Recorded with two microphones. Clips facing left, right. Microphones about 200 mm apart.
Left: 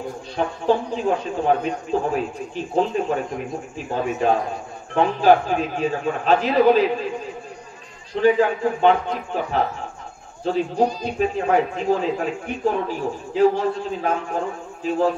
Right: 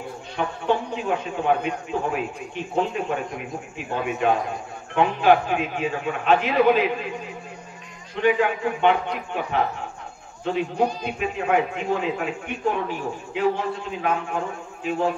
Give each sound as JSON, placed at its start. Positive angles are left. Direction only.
{"t": 0.4, "sound": "a man's voice", "side_deg": 35}
{"t": 8.1, "sound": "a man's voice", "side_deg": 35}